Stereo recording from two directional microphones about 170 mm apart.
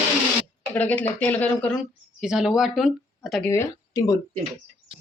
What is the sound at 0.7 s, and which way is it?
Speech, 10° left (ahead or behind).